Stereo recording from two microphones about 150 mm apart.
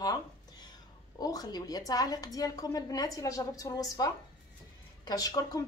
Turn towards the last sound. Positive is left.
turn(degrees=25)  # may be behind; listen again after turning